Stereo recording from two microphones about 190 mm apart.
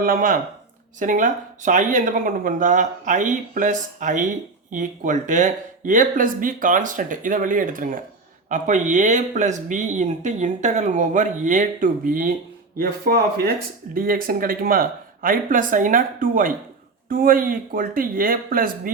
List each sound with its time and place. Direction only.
0.0 s speech: 50° right (ahead or behind)